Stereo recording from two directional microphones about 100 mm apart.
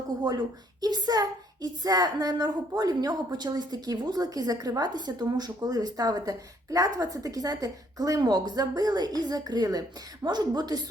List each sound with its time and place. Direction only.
0.8 s a woman's voice: 45° right (ahead or behind)